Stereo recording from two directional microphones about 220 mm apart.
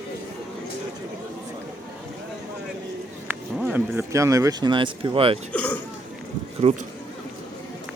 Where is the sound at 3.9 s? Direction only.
15° right (ahead or behind).